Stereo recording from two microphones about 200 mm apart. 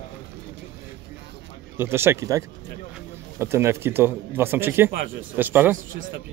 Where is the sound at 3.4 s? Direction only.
10° right (ahead or behind).